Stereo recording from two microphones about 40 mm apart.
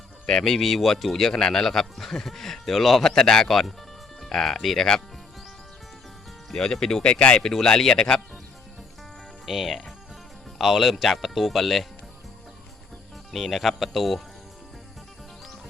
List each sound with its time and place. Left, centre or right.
0.3 s speech: centre
0.5 s speech: centre
1.3 s speech: centre
3.0 s speech: centre
3.5 s speech: centre
6.5 s speech: centre; by 7.3 s left
7.3 s speech: centre
9.5 s speech: centre
13.3 s speech: centre